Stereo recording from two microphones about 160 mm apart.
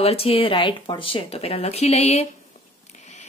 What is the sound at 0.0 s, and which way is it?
Speech, 35° left (ahead or behind).